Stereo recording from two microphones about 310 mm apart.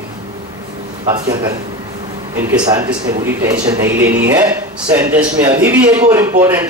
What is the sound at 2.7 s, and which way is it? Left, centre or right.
A man's voice, centre.